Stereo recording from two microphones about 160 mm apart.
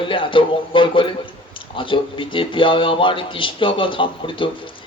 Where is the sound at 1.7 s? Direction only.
30° left (ahead or behind).